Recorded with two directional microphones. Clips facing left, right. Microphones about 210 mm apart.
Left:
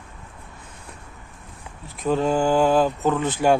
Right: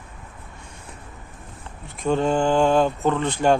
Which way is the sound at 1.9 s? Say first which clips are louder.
Even; centre (ahead or behind).